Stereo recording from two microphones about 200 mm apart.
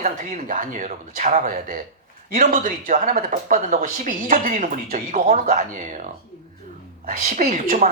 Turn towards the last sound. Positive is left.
turn(degrees=-45)  # may be behind; listen again after turning